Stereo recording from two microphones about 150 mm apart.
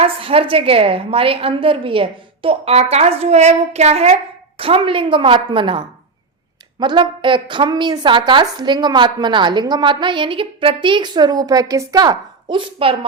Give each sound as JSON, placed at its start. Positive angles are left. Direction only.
{"t": 0.0, "sound": "a woman's voice", "side_deg": -40}